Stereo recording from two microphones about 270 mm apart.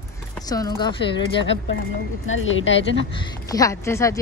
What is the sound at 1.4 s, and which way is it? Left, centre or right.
A woman's voice, left.